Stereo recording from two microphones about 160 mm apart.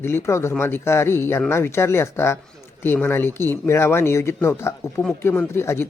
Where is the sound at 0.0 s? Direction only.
15° left (ahead or behind).